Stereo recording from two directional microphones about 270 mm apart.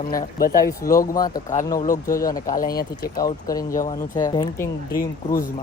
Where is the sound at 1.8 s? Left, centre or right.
Left.